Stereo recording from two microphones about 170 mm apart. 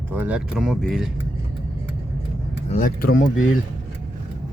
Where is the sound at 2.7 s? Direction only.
50° left (ahead or behind).